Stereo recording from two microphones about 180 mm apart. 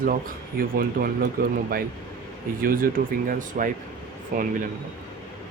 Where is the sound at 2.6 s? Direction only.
50° right (ahead or behind).